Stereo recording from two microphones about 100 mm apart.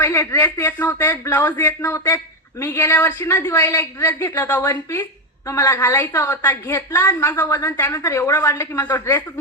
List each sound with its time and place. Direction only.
0.0 s a woman's voice: 25° left (ahead or behind)